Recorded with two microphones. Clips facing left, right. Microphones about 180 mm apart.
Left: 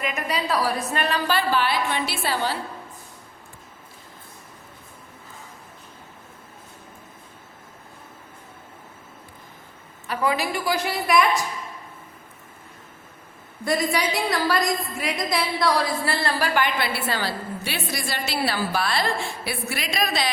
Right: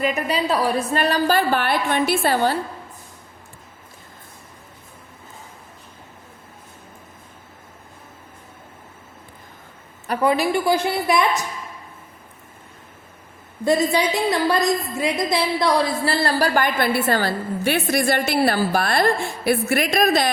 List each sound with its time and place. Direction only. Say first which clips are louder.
0.0 s a woman's voice: right 5 dB; 30° right (ahead or behind); by 2.6 s 50° right (ahead or behind)
10.1 s a woman's voice: right 5 dB; 35° right (ahead or behind)
13.7 s a woman's voice: right 5 dB; 25° right (ahead or behind)
16.2 s a woman's voice: right 4 dB; 40° right (ahead or behind)